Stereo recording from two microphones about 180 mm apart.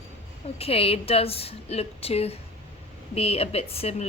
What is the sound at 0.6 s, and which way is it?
A woman's voice, 35° left (ahead or behind).